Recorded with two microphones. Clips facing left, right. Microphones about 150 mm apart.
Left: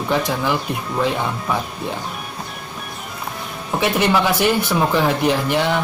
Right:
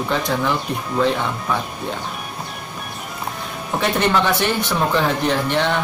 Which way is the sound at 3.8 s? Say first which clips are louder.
Left 1 dB; 5° left (ahead or behind).